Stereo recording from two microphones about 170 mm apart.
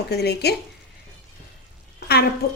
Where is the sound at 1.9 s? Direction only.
70° left (ahead or behind).